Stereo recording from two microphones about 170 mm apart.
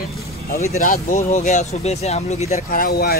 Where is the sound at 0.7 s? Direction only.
55° left (ahead or behind).